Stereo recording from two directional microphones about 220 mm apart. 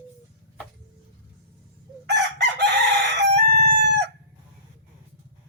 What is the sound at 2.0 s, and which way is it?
Chicken, 50° right (ahead or behind).